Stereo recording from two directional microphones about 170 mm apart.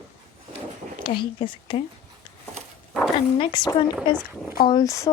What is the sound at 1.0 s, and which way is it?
Speech, 30° left (ahead or behind).